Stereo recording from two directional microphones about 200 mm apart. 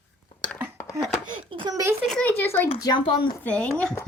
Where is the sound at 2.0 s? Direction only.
5° left (ahead or behind).